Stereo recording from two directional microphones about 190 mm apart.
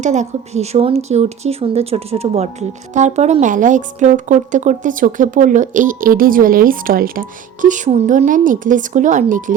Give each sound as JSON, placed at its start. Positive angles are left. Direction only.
{"t": 0.0, "sound": "speech", "side_deg": -40}